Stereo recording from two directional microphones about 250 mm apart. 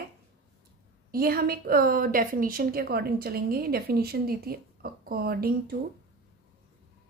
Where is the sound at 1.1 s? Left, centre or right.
Right.